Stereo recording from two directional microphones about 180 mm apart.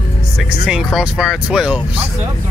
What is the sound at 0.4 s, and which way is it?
Speech, centre (ahead or behind).